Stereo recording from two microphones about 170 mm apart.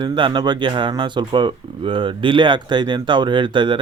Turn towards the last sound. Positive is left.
turn(degrees=-30)  # may be behind; listen again after turning